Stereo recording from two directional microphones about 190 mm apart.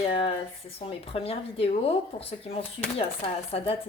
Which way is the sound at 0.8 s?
30° left (ahead or behind).